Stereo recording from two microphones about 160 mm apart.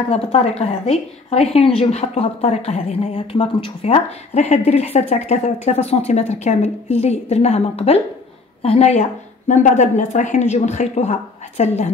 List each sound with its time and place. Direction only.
0.1 s a woman's voice: 40° left (ahead or behind)